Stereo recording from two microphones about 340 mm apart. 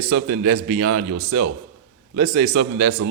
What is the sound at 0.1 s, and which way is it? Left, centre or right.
Speech, right.